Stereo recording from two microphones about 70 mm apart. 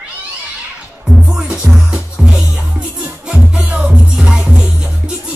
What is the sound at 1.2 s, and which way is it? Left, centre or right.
Music, centre.